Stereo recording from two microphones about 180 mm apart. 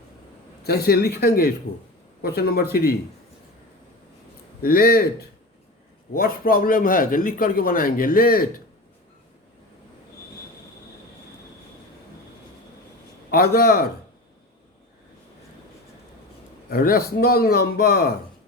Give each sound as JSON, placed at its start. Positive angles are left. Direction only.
{"t": 0.6, "sound": "a man's voice", "side_deg": 60}
{"t": 4.6, "sound": "a man's voice", "side_deg": 55}
{"t": 6.1, "sound": "a man's voice", "side_deg": 50}
{"t": 13.3, "sound": "a man's voice", "side_deg": 55}
{"t": 16.6, "sound": "a man's voice", "side_deg": 55}